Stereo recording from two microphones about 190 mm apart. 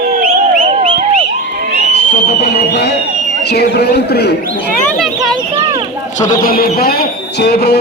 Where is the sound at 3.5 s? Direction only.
60° left (ahead or behind).